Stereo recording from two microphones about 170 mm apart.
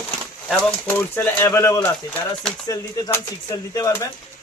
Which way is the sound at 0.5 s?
10° left (ahead or behind).